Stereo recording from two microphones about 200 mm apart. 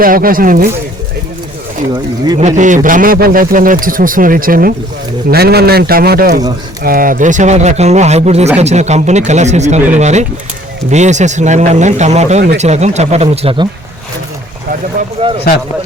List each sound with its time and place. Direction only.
0.0 s a man's voice: 45° right (ahead or behind)
2.4 s a man's voice: 35° right (ahead or behind)
15.2 s speech: 30° right (ahead or behind)